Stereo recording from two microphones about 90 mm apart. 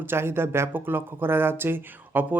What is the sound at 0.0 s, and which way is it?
Speech, 25° right (ahead or behind).